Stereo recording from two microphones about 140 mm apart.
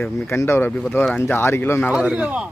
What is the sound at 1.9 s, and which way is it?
Speech, 5° right (ahead or behind).